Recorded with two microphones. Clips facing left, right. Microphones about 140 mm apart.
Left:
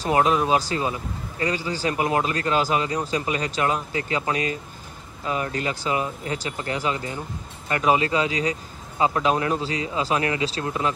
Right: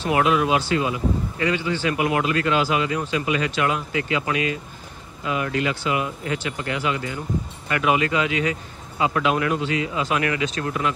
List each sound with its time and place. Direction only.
0.0 s speech: 35° left (ahead or behind)